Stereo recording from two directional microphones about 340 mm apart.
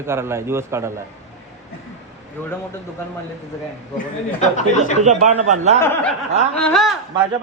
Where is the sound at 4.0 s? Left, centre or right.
Left.